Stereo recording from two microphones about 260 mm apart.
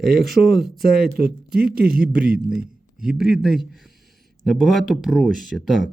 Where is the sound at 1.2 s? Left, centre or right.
Right.